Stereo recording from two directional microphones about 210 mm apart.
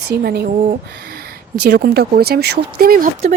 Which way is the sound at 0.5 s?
35° right (ahead or behind).